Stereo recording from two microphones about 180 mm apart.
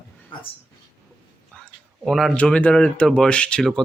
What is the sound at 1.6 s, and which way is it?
Speech, centre (ahead or behind).